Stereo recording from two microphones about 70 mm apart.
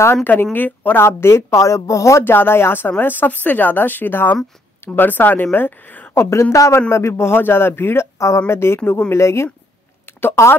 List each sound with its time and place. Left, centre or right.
0.0 s a man's voice: left
1.0 s a woman's voice: left
2.2 s a man's voice: left
6.5 s a woman's voice: left
9.1 s a man's voice: left